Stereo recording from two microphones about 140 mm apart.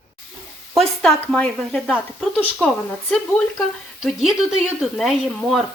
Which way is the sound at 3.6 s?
Centre (ahead or behind).